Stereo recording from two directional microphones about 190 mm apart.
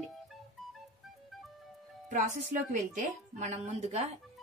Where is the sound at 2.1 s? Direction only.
40° right (ahead or behind).